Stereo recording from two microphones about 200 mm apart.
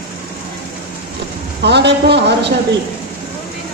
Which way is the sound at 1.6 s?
55° right (ahead or behind).